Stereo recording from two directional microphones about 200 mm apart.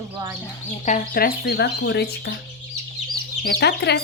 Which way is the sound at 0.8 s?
40° left (ahead or behind).